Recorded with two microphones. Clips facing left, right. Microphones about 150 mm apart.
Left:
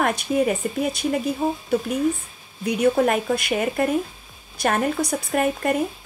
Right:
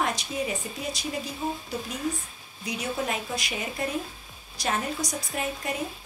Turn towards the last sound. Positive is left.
turn(degrees=55)  # may be behind; listen again after turning